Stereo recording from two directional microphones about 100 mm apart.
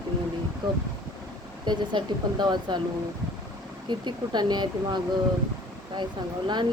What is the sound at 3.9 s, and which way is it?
Speech, 50° right (ahead or behind).